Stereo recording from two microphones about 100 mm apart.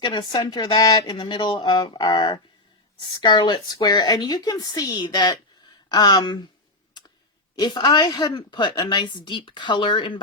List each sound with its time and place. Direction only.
0.0 s a woman's voice: 45° left (ahead or behind)
7.5 s a woman's voice: 45° left (ahead or behind)